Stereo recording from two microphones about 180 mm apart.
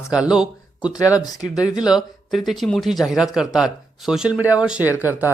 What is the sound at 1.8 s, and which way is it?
Speech, centre (ahead or behind).